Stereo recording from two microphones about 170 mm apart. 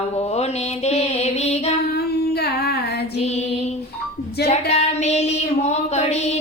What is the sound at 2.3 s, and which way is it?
Singing, 70° left (ahead or behind).